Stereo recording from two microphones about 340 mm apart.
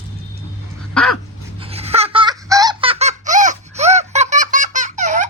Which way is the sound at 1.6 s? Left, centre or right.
Centre.